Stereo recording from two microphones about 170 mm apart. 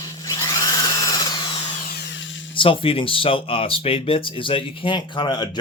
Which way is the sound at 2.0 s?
90° left.